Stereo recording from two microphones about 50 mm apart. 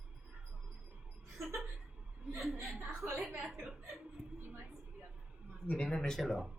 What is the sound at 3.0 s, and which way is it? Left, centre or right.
Speech, right.